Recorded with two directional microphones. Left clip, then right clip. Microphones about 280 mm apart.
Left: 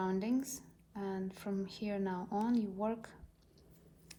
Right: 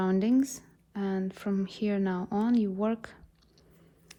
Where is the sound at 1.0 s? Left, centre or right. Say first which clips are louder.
Right 8 dB; right.